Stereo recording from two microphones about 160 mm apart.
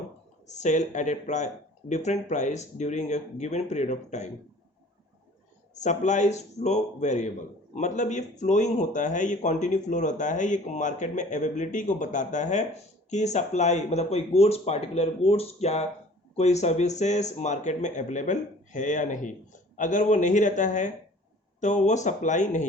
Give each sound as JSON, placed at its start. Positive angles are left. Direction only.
{"t": 0.4, "sound": "speech", "side_deg": 45}
{"t": 5.7, "sound": "speech", "side_deg": 50}